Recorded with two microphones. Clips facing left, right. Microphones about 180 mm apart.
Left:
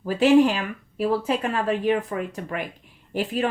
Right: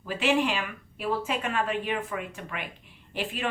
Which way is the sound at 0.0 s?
40° left (ahead or behind).